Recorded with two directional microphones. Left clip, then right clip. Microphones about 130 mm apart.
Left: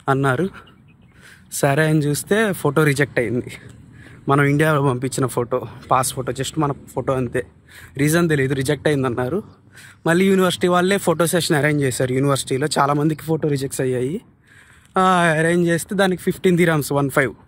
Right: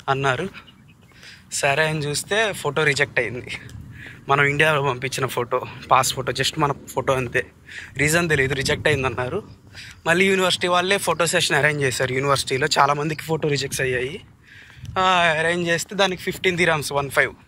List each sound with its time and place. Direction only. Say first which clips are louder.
0.0 s speech: left 2 dB; 55° left (ahead or behind)
3.3 s speech: left 4 dB; 50° left (ahead or behind)
5.9 s speech: right 1 dB; 30° left (ahead or behind)
7.9 s speech: left 1 dB; 45° left (ahead or behind)
15.0 s speech: left 2 dB; 60° left (ahead or behind)